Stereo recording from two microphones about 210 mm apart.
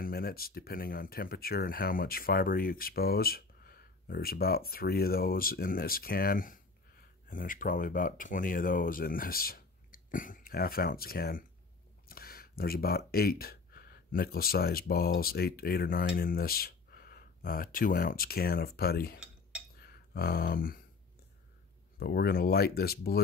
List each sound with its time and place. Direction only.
0.0 s speech: 45° left (ahead or behind)
21.9 s speech: 50° left (ahead or behind)